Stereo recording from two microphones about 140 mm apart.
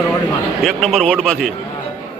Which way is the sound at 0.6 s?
Centre (ahead or behind).